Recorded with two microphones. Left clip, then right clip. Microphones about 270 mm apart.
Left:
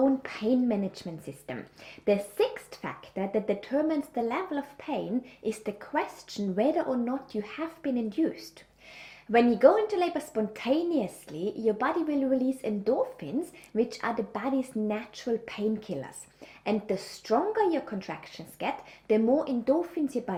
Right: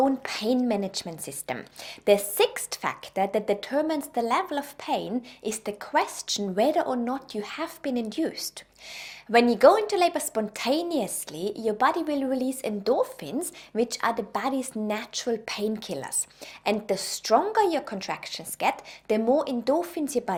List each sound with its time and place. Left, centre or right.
0.0 s a woman's voice: right